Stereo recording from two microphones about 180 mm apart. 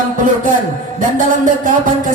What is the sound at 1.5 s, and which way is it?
Speech, 45° right (ahead or behind).